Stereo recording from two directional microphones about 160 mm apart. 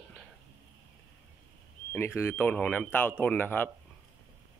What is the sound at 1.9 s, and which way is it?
Speech, 15° left (ahead or behind).